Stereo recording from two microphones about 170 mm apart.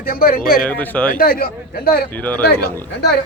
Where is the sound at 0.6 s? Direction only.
10° left (ahead or behind).